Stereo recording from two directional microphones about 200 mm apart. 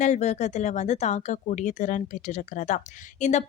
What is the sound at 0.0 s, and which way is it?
Speech, 35° left (ahead or behind).